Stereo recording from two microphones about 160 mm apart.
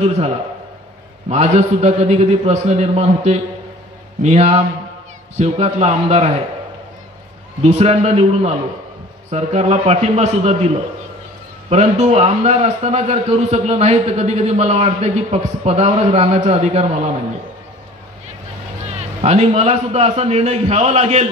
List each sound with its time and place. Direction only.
1.3 s a man's voice: 45° right (ahead or behind)
7.6 s a man's voice: 45° right (ahead or behind)
11.7 s a man's voice: 45° right (ahead or behind)
18.9 s a man's voice: 45° right (ahead or behind)